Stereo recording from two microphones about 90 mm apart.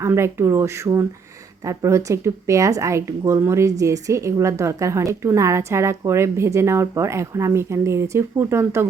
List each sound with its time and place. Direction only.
0.0 s a woman's voice: 30° right (ahead or behind)